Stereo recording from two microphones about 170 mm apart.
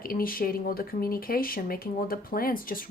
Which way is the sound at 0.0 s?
60° left (ahead or behind).